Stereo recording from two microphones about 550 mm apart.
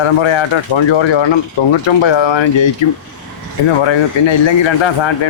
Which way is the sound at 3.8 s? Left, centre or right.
Left.